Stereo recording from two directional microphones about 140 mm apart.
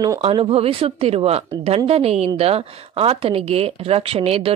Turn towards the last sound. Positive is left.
turn(degrees=-45)  # may be behind; listen again after turning